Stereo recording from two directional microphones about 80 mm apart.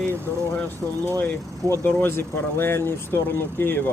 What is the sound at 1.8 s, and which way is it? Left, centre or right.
Speech, left.